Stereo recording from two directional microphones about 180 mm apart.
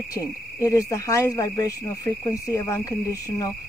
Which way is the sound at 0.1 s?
15° left (ahead or behind).